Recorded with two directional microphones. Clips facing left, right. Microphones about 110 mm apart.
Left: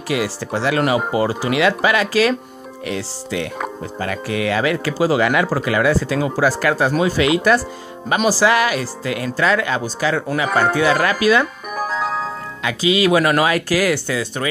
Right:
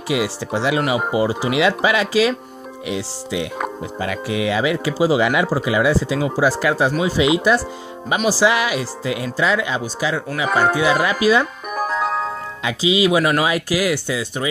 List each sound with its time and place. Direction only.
0.1 s speech: 15° right (ahead or behind)
11.7 s music: 45° right (ahead or behind)
12.6 s speech: 20° right (ahead or behind)